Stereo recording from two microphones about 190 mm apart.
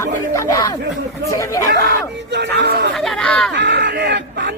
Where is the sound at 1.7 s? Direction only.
65° right (ahead or behind).